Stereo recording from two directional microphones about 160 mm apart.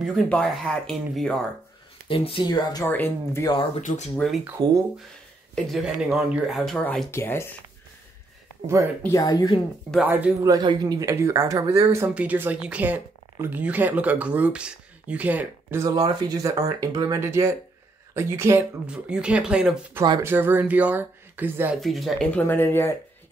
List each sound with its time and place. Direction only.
0.0 s speech: 5° left (ahead or behind)
2.0 s speech: 35° left (ahead or behind)
2.9 s speech: 10° left (ahead or behind)
3.4 s speech: 30° left (ahead or behind)
3.8 s speech: 50° left (ahead or behind)
5.5 s speech: centre (ahead or behind)
7.1 s speech: 15° left (ahead or behind)
8.6 s speech: 15° right (ahead or behind)
9.0 s speech: 20° left (ahead or behind)
10.0 s speech: 10° right (ahead or behind)
21.7 s speech: centre (ahead or behind)